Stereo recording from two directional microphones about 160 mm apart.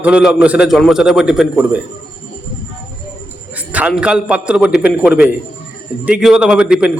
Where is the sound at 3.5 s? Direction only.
10° right (ahead or behind).